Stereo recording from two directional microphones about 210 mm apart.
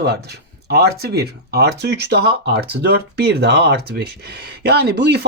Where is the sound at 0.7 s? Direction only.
50° right (ahead or behind).